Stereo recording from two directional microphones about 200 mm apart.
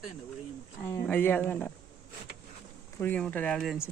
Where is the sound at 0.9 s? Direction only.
10° left (ahead or behind).